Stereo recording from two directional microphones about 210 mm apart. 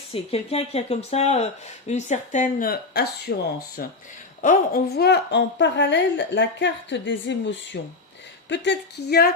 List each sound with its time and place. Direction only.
0.1 s a woman's voice: 30° left (ahead or behind); by 9.3 s 50° left (ahead or behind)